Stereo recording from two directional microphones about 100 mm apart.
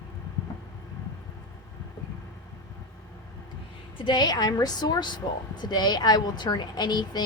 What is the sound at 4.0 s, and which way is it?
A woman's voice, 50° left (ahead or behind).